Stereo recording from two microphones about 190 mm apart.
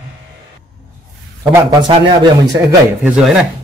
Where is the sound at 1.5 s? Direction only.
25° right (ahead or behind).